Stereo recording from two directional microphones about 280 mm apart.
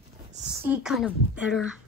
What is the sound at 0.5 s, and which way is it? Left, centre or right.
A woman's voice, centre.